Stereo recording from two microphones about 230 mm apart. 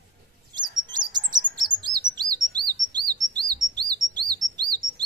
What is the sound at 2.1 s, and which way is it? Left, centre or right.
Chirp, centre.